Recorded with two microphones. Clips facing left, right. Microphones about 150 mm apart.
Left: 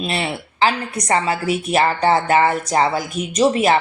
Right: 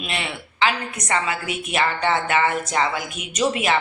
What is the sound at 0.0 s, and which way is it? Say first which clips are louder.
A woman's voice: left 6 dB; 35° left (ahead or behind).